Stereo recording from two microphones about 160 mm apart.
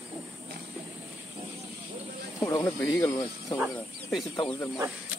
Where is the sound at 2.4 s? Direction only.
20° left (ahead or behind).